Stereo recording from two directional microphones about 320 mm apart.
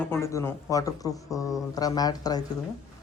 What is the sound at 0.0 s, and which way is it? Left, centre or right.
Speech, centre.